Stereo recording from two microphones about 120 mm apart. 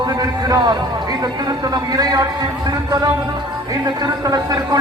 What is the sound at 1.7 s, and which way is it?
Speech, 35° right (ahead or behind).